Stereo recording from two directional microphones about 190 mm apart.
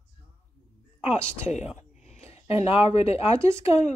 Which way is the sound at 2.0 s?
35° left (ahead or behind).